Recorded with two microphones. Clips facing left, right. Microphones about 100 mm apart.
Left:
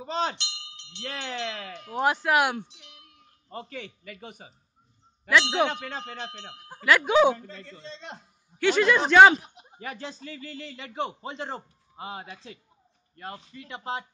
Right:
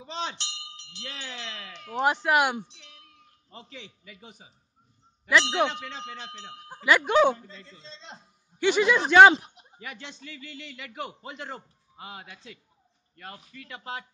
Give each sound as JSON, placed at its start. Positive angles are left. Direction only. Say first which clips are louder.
{"t": 0.0, "sound": "speech", "louder": "left 5 dB", "side_deg": 45}
{"t": 1.9, "sound": "speech", "louder": "even", "side_deg": 5}
{"t": 3.4, "sound": "a man's voice", "louder": "left 7 dB", "side_deg": 50}
{"t": 6.8, "sound": "speech", "louder": "left 1 dB", "side_deg": 0}
{"t": 7.4, "sound": "a man's voice", "louder": "left 5 dB", "side_deg": 60}
{"t": 8.5, "sound": "speech", "louder": "left 1 dB", "side_deg": -5}
{"t": 9.8, "sound": "a man's voice", "louder": "left 5 dB", "side_deg": 40}